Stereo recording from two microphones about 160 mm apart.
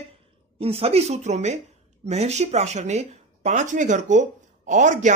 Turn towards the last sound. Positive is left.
turn(degrees=-50)  # may be behind; listen again after turning